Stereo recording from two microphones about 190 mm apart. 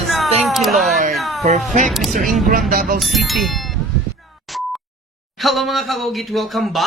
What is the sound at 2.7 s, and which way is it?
Speech, 50° right (ahead or behind).